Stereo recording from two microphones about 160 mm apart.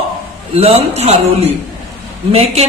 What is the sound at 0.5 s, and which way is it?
Speech, 40° right (ahead or behind).